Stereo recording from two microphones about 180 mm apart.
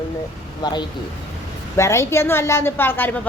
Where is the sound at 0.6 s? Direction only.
25° left (ahead or behind).